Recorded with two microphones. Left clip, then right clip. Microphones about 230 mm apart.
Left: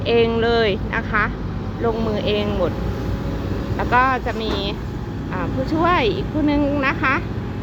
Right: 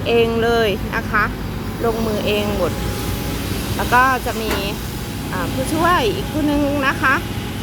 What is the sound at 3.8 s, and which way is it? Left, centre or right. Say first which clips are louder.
Speech: right 2 dB; centre.